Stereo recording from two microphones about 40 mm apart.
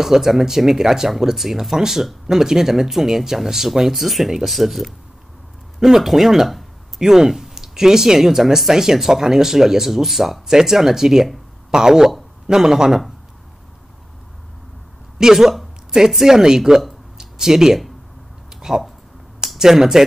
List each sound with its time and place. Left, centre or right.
0.0 s speech: centre
15.1 s speech: centre
17.2 s a sound: centre
19.4 s speech: centre